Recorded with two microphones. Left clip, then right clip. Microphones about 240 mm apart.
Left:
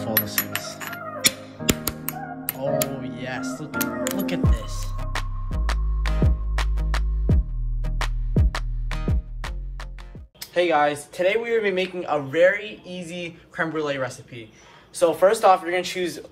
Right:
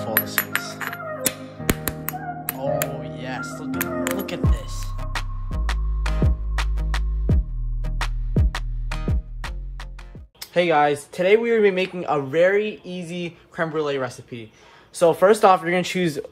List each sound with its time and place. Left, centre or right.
0.0 s music: centre
2.6 s music: centre
10.4 s speech: right
15.0 s speech: right